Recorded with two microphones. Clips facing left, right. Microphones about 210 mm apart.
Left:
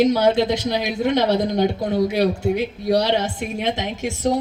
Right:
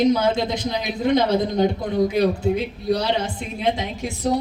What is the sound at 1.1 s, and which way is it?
Speech, 40° left (ahead or behind).